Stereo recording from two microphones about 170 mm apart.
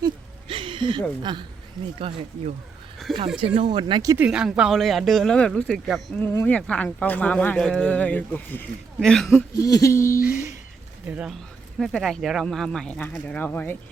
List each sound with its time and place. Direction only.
0.0 s a sound: 30° right (ahead or behind)
1.2 s speech: 25° right (ahead or behind)
3.0 s speech: centre (ahead or behind)
3.4 s speech: 40° right (ahead or behind)
3.7 s speech: 30° right (ahead or behind)
4.2 s speech: 5° right (ahead or behind)
9.3 s a sound: 20° left (ahead or behind)
11.0 s speech: 10° right (ahead or behind); by 13.7 s 10° left (ahead or behind)